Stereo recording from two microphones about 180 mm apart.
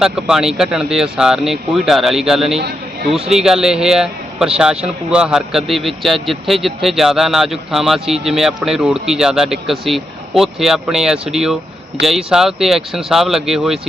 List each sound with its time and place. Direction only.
0.0 s a man's voice: 5° right (ahead or behind)
2.6 s a sound: 65° right (ahead or behind)
3.2 s a man's voice: 5° right (ahead or behind)